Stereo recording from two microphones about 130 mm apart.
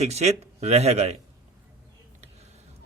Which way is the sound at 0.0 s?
55° right (ahead or behind).